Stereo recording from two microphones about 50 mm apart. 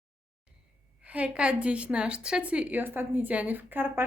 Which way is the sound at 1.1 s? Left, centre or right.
Right.